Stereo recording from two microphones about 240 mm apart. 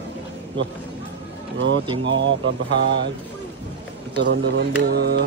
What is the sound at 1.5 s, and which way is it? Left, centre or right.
Speech, right.